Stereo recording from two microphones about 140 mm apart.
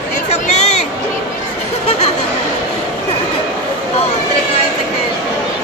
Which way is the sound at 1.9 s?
50° left (ahead or behind).